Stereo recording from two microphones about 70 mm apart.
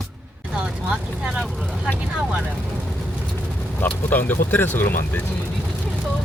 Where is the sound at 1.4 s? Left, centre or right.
Centre.